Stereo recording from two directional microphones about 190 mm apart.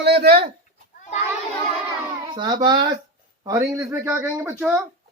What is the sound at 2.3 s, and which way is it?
A child's voice, 25° right (ahead or behind).